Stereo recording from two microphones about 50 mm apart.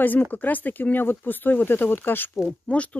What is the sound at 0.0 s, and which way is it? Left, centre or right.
Speech, left.